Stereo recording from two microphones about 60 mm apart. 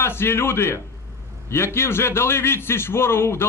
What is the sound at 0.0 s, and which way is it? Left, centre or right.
A man's voice, left.